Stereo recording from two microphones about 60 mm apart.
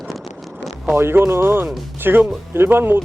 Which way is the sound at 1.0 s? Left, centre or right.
Right.